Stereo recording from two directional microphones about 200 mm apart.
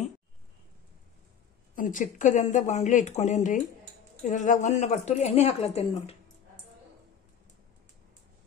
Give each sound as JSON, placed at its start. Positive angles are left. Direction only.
{"t": 1.8, "sound": "a woman's voice", "side_deg": 40}